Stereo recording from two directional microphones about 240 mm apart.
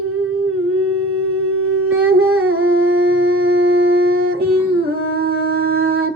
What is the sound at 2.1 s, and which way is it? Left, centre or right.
Humming, right.